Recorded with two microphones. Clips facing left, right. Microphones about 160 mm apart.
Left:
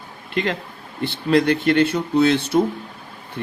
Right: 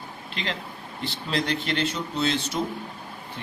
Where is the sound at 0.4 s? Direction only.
50° left (ahead or behind).